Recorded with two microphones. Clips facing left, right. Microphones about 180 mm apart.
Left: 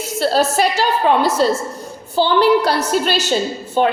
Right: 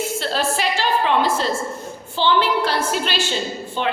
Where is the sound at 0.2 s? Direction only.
40° left (ahead or behind).